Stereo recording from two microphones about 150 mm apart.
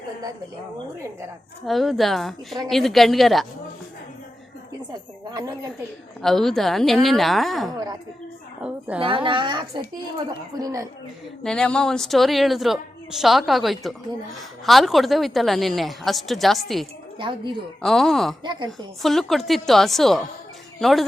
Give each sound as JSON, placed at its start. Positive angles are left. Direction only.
{"t": 1.6, "sound": "a woman's voice", "side_deg": 0}
{"t": 6.2, "sound": "a woman's voice", "side_deg": 0}
{"t": 9.0, "sound": "speech", "side_deg": -35}
{"t": 10.2, "sound": "a woman's voice", "side_deg": -20}
{"t": 11.4, "sound": "a woman's voice", "side_deg": 5}
{"t": 17.2, "sound": "speech", "side_deg": -35}
{"t": 17.8, "sound": "a woman's voice", "side_deg": 5}
{"t": 18.4, "sound": "a woman's voice", "side_deg": -30}
{"t": 19.0, "sound": "a woman's voice", "side_deg": 0}